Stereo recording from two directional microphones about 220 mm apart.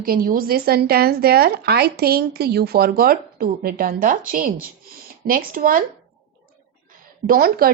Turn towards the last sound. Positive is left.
turn(degrees=-45)  # may be behind; listen again after turning